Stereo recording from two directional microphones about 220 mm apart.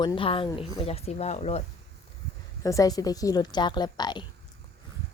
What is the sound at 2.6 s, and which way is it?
A woman's voice, 15° left (ahead or behind).